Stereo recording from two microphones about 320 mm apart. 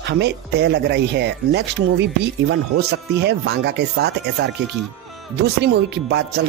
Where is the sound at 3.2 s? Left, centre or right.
Right.